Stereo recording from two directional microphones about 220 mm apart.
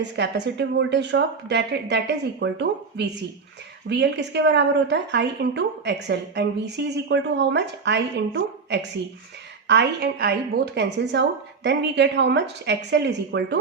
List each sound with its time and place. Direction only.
0.0 s a woman's voice: 50° right (ahead or behind)